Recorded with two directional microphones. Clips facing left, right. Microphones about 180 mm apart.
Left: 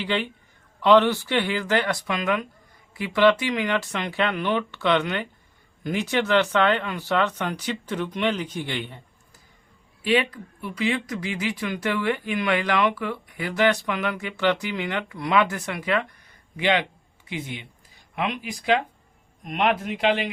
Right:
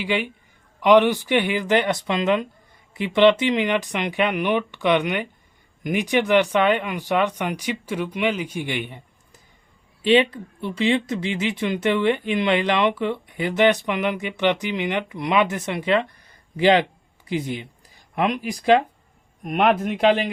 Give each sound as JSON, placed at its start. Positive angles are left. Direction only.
{"t": 0.0, "sound": "speech", "side_deg": -10}
{"t": 10.0, "sound": "speech", "side_deg": -25}